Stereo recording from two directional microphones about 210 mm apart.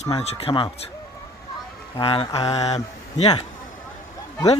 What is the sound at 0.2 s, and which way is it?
Speech, 30° left (ahead or behind).